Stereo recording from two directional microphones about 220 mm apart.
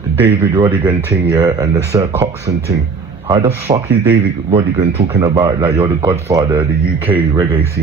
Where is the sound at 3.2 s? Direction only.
25° right (ahead or behind).